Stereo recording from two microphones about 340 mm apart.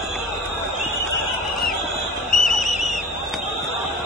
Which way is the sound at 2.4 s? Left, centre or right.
Left.